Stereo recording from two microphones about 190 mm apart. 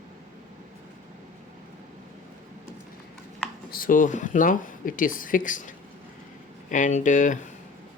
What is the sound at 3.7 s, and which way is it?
Speech, 50° left (ahead or behind).